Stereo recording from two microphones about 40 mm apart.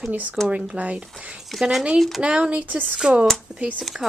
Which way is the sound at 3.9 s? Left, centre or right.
Centre.